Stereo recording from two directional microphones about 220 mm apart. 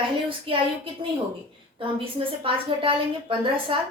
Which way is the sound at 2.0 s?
25° right (ahead or behind).